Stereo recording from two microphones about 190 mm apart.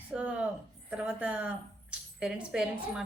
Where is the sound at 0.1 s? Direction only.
5° right (ahead or behind).